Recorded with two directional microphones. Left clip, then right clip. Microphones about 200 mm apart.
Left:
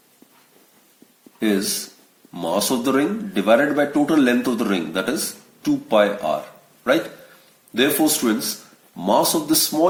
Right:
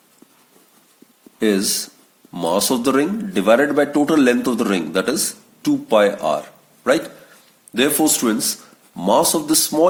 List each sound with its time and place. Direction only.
1.4 s speech: 50° right (ahead or behind)